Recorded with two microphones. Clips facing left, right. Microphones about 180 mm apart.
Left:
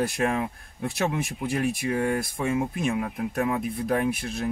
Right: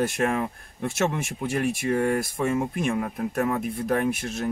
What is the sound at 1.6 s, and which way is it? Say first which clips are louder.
Speech: right 2 dB; 45° right (ahead or behind).